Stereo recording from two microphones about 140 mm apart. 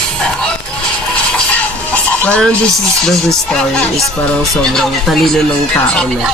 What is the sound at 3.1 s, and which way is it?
Speech, 5° left (ahead or behind).